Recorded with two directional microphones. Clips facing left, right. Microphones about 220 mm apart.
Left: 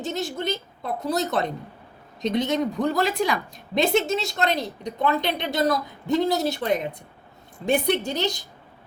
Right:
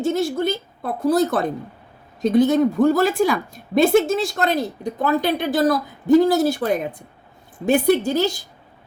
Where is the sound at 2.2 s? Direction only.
5° right (ahead or behind).